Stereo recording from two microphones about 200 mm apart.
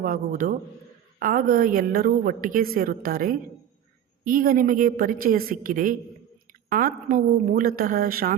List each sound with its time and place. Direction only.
0.0 s a woman's voice: 45° right (ahead or behind)